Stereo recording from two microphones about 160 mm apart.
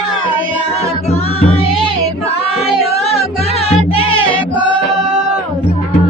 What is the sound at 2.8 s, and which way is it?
Music, 40° left (ahead or behind).